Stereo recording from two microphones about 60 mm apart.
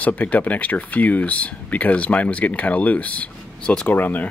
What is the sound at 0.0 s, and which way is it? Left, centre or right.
Speech, left.